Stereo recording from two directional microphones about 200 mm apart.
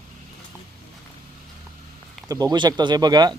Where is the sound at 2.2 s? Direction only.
20° right (ahead or behind).